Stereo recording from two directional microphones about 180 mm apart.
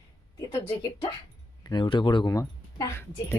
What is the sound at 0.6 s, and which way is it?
Speech, 30° left (ahead or behind).